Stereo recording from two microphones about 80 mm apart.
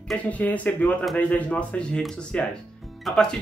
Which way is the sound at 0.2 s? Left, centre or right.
Centre.